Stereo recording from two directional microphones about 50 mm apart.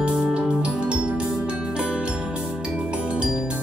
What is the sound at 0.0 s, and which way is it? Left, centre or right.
Music, right.